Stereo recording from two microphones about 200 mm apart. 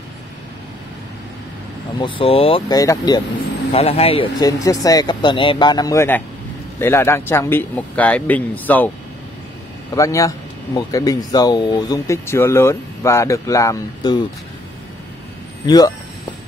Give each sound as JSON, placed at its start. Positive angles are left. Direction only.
{"t": 2.0, "sound": "speech", "side_deg": 25}
{"t": 3.7, "sound": "speech", "side_deg": 30}
{"t": 9.9, "sound": "speech", "side_deg": 15}
{"t": 15.6, "sound": "speech", "side_deg": 20}